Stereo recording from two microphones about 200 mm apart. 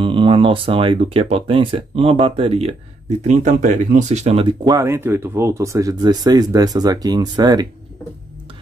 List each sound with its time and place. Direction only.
0.0 s speech: 25° right (ahead or behind)